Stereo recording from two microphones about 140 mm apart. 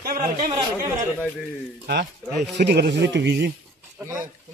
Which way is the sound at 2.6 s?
65° right (ahead or behind).